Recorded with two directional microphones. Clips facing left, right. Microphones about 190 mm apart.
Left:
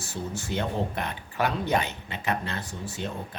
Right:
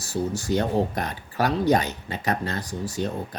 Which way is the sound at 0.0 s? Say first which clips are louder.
Right 7 dB; 40° right (ahead or behind).